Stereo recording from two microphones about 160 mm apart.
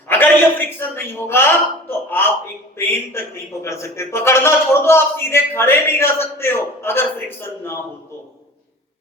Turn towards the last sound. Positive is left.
turn(degrees=15)  # may be behind; listen again after turning